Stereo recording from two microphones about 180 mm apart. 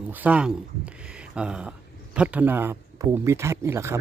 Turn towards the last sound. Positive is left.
turn(degrees=-15)  # may be behind; listen again after turning